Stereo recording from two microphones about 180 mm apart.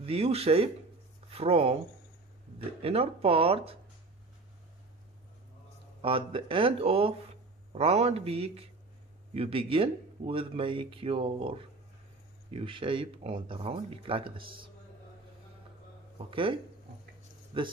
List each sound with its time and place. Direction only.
0.0 s speech: 35° right (ahead or behind)
2.8 s speech: 30° right (ahead or behind)
6.0 s speech: 30° right (ahead or behind)
16.3 s speech: 30° right (ahead or behind)